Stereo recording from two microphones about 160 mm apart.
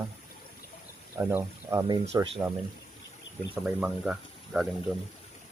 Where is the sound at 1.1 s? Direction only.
15° right (ahead or behind).